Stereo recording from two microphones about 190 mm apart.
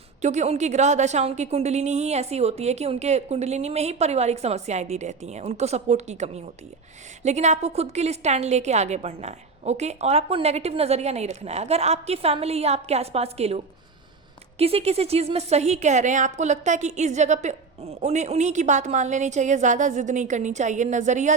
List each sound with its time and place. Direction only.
0.2 s a woman's voice: 35° right (ahead or behind)
14.6 s a woman's voice: 30° right (ahead or behind)